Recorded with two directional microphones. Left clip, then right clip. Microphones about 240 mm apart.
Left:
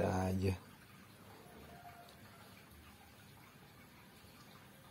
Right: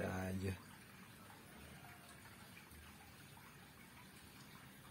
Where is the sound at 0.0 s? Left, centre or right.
Left.